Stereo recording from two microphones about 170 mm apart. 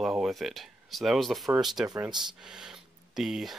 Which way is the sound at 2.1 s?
25° right (ahead or behind).